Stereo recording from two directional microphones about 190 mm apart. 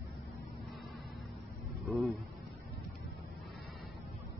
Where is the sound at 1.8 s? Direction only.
Centre (ahead or behind).